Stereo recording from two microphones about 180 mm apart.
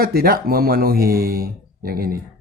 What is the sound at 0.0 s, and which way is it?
Speech, 55° right (ahead or behind).